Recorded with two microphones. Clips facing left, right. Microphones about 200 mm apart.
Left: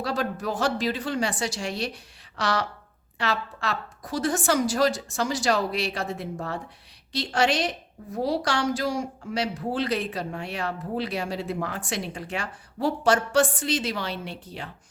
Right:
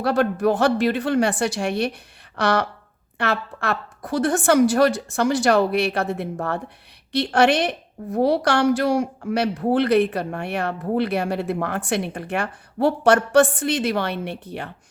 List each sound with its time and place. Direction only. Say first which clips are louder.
0.0 s a woman's voice: right 9 dB; 60° right (ahead or behind)